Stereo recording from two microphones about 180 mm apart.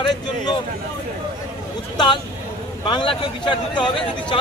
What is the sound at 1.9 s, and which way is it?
Speech, 25° left (ahead or behind).